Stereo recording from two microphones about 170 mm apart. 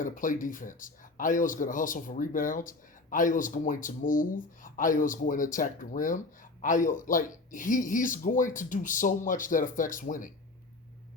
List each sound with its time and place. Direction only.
0.0 s speech: 50° left (ahead or behind)